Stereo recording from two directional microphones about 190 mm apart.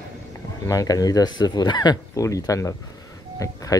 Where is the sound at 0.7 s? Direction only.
20° left (ahead or behind).